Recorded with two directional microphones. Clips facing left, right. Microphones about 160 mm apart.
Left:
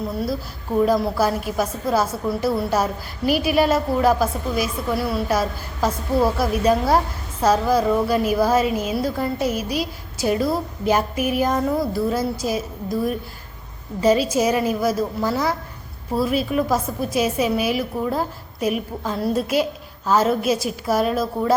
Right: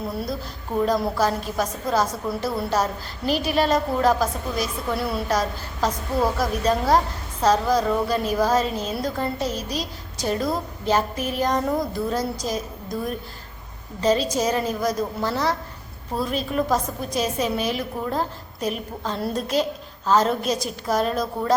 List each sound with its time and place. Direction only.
0.8 s a woman's voice: 5° left (ahead or behind)